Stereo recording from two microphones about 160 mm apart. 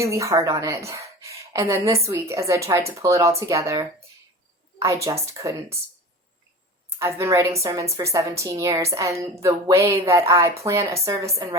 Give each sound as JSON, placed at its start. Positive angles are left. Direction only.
{"t": 0.0, "sound": "a woman's voice", "side_deg": -20}
{"t": 7.0, "sound": "a woman's voice", "side_deg": -15}